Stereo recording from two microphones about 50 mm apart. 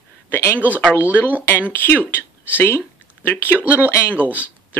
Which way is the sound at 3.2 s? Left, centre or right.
Left.